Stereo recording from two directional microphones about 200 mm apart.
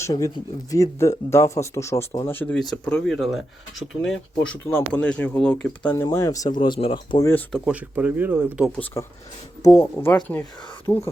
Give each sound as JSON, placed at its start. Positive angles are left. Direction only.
{"t": 0.0, "sound": "speech", "side_deg": 15}
{"t": 7.3, "sound": "speech", "side_deg": 10}
{"t": 7.6, "sound": "speech", "side_deg": -5}
{"t": 10.0, "sound": "speech", "side_deg": 15}